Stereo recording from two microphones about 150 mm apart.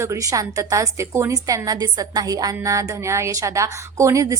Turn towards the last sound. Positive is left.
turn(degrees=-20)  # may be behind; listen again after turning